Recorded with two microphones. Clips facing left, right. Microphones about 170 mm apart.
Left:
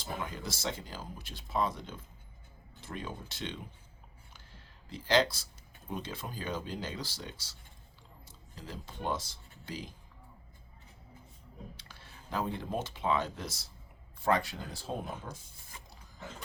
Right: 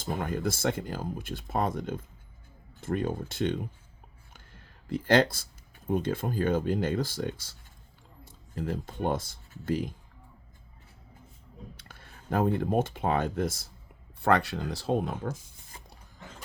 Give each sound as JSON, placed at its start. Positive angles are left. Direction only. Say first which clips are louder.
{"t": 0.0, "sound": "speech", "louder": "right 8 dB", "side_deg": -50}
{"t": 4.9, "sound": "speech", "louder": "right 5 dB", "side_deg": -50}
{"t": 11.8, "sound": "speech", "louder": "right 2 dB", "side_deg": -50}
{"t": 14.2, "sound": "speech", "louder": "right 5 dB", "side_deg": -65}